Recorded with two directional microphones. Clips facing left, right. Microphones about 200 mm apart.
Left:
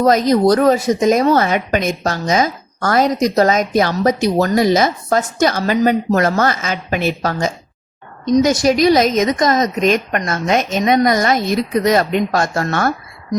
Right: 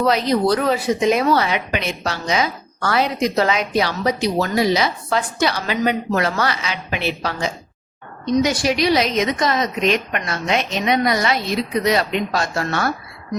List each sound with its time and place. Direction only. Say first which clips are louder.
0.0 s speech: left 5 dB; 45° left (ahead or behind)